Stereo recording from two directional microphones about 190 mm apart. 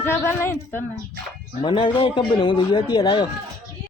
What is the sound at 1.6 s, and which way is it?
Speech, 25° left (ahead or behind).